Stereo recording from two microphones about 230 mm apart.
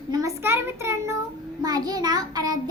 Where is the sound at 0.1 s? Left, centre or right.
Centre.